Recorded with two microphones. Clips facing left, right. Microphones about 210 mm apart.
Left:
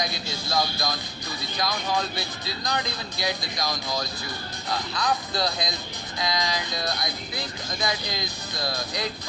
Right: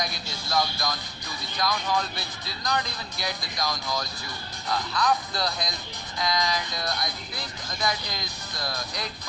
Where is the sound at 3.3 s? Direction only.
30° left (ahead or behind).